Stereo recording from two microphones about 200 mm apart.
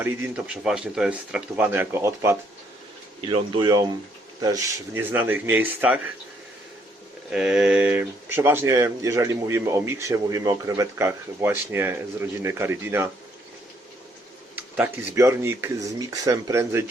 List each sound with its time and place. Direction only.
0.0 s speech: 10° right (ahead or behind)
3.2 s speech: 25° right (ahead or behind); by 6.0 s 10° right (ahead or behind)
7.3 s speech: 5° right (ahead or behind)
14.5 s speech: 10° right (ahead or behind)